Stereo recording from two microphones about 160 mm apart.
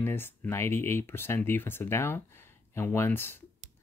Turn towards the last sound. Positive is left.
turn(degrees=15)  # may be behind; listen again after turning